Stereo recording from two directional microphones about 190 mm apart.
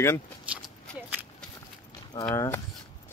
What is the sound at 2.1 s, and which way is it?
Speech, 20° left (ahead or behind).